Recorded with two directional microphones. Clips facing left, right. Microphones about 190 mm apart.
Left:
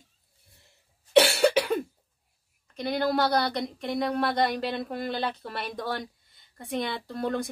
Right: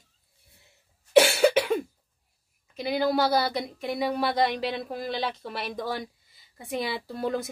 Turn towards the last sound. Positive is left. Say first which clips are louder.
# even
turn(degrees=-5)  # may be behind; listen again after turning